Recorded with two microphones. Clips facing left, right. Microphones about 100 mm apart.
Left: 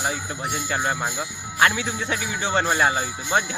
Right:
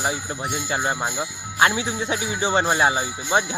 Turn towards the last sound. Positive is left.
turn(degrees=-10)  # may be behind; listen again after turning